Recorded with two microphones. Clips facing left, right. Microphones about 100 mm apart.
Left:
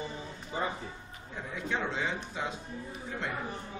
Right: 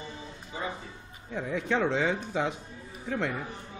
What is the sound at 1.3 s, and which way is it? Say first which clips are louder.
Speech: right 6 dB; 75° right (ahead or behind).